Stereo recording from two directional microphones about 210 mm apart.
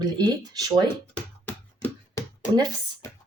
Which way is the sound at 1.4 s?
10° left (ahead or behind).